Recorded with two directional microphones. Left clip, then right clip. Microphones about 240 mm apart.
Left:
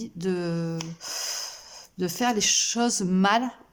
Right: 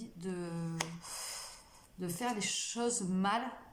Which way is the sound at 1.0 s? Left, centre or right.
Left.